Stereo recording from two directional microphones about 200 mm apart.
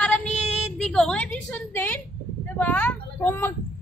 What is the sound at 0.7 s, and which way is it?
A woman's voice, 5° left (ahead or behind).